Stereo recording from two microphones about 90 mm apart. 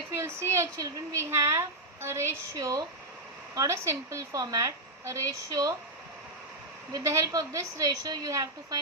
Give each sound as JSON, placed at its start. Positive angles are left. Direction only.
{"t": 0.1, "sound": "a woman's voice", "side_deg": -30}
{"t": 6.9, "sound": "a woman's voice", "side_deg": -35}